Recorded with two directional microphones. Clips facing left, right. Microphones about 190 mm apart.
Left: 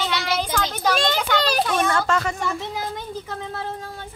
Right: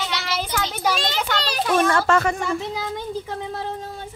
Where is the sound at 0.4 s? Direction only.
5° right (ahead or behind).